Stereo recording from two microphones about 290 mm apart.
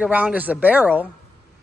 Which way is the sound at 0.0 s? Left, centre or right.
Centre.